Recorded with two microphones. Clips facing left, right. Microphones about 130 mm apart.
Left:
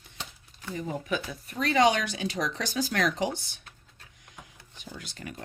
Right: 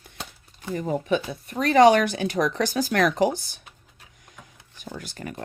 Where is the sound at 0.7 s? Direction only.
50° right (ahead or behind).